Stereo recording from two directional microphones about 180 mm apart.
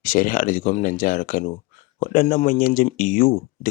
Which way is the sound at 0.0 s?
50° left (ahead or behind).